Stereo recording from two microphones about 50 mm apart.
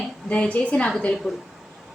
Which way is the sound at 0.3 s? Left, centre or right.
Left.